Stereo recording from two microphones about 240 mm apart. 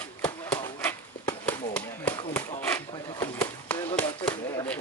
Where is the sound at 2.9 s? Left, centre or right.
Centre.